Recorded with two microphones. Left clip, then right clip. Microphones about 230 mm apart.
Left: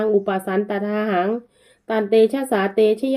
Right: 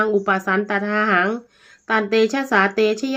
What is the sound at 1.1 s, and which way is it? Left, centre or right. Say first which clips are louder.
Speech: right 1 dB; right.